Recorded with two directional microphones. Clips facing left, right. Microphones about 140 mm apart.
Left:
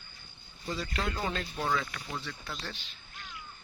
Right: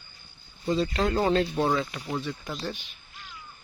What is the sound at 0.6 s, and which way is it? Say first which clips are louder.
Speech: right 9 dB; 25° right (ahead or behind).